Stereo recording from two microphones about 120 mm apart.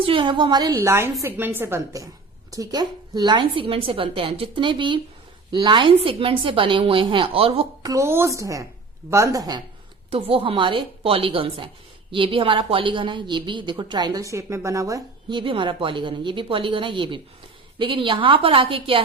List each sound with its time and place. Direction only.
0.0 s a woman's voice: 45° right (ahead or behind)
0.8 s a woman's voice: 20° right (ahead or behind); by 7.9 s 50° right (ahead or behind)
7.9 s a woman's voice: 25° right (ahead or behind)
10.1 s a woman's voice: 50° right (ahead or behind); by 15.0 s 25° right (ahead or behind)
15.3 s a woman's voice: 45° right (ahead or behind)